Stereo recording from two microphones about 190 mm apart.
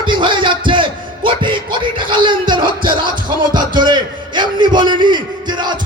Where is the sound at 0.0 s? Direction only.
25° right (ahead or behind).